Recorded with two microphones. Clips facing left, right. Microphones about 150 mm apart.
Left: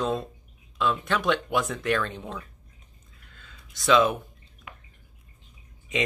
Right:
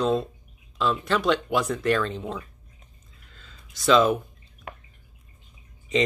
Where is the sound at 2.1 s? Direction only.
20° right (ahead or behind).